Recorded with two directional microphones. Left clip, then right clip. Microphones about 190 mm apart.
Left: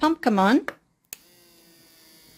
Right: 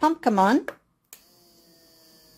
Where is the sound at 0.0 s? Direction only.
10° left (ahead or behind).